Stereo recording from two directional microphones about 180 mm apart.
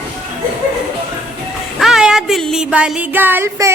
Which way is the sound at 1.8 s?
Centre (ahead or behind).